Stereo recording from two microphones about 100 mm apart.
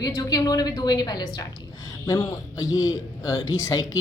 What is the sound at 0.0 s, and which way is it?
A woman's voice, 40° left (ahead or behind).